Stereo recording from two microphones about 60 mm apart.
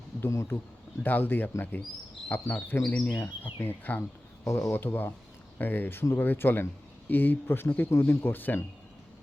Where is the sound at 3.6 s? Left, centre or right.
Left.